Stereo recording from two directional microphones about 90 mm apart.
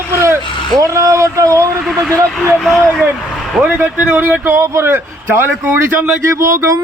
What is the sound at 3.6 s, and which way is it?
A man's voice, 15° right (ahead or behind).